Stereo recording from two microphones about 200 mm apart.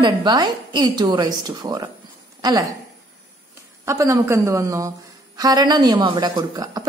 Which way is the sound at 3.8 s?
15° right (ahead or behind).